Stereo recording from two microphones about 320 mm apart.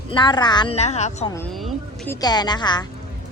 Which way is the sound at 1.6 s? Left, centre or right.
Centre.